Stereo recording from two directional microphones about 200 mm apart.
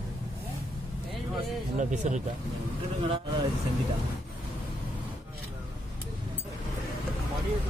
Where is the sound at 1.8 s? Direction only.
35° right (ahead or behind).